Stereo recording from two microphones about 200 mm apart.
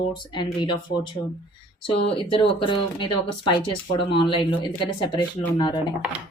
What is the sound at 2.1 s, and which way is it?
Speech, 25° left (ahead or behind).